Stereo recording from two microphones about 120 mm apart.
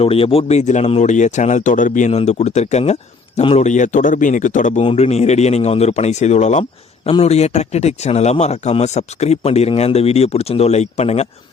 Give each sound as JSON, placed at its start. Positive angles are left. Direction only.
{"t": 0.0, "sound": "a man's voice", "side_deg": 50}
{"t": 3.6, "sound": "speech", "side_deg": 90}
{"t": 4.8, "sound": "a man's voice", "side_deg": 55}